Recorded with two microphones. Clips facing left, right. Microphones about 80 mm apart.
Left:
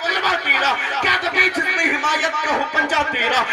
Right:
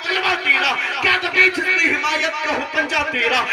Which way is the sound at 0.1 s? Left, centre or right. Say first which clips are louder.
Right 1 dB; left.